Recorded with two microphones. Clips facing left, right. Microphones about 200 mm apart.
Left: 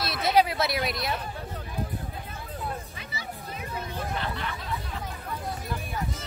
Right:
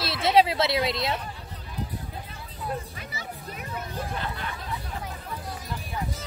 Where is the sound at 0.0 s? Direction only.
25° right (ahead or behind).